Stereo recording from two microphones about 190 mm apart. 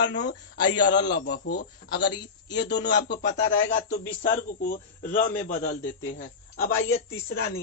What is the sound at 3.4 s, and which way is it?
Speech, 90° left.